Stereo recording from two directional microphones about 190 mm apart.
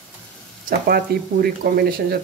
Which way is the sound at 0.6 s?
55° right (ahead or behind).